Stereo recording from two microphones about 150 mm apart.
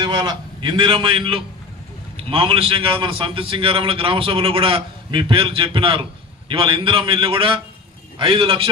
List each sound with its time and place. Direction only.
0.0 s a man's voice: 30° right (ahead or behind)